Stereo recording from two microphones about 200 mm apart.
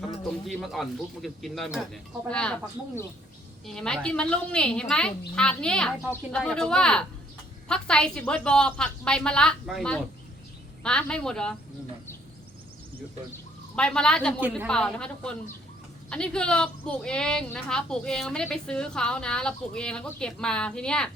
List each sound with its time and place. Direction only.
0.4 s a woman's voice: centre (ahead or behind)
13.7 s a woman's voice: 5° left (ahead or behind)